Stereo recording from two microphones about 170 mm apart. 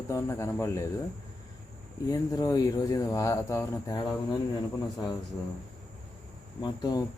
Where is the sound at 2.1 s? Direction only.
20° left (ahead or behind).